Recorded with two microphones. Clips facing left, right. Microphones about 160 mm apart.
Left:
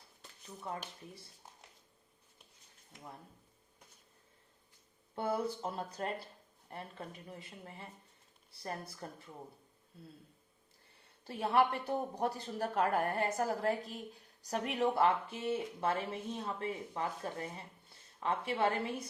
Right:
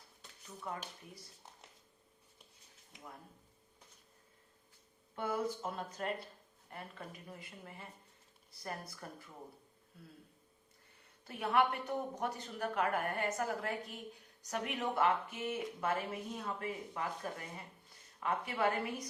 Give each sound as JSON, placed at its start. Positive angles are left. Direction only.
{"t": 5.1, "sound": "a woman's voice", "side_deg": 30}
{"t": 11.3, "sound": "a woman's voice", "side_deg": 30}